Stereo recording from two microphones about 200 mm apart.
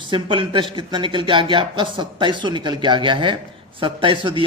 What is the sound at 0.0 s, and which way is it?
A man's voice, 25° right (ahead or behind).